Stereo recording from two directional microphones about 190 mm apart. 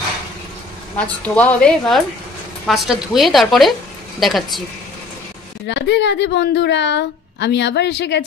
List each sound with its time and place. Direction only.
0.9 s a woman's voice: 5° left (ahead or behind)
5.7 s a woman's voice: 65° left (ahead or behind)